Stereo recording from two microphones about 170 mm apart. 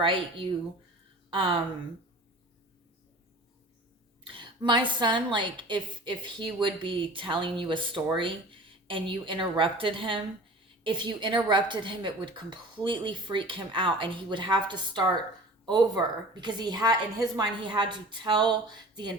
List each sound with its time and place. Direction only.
0.0 s speech: 30° right (ahead or behind)
4.2 s a woman's voice: 30° right (ahead or behind)